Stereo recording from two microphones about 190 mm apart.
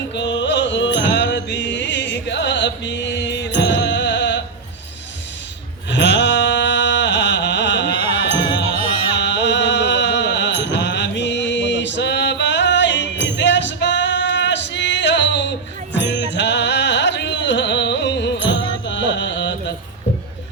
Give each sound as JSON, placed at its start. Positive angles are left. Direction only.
{"t": 0.1, "sound": "music", "side_deg": 70}
{"t": 5.9, "sound": "music", "side_deg": 65}
{"t": 18.9, "sound": "carnatic music", "side_deg": 70}